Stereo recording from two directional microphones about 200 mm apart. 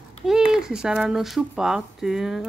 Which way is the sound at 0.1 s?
Centre (ahead or behind).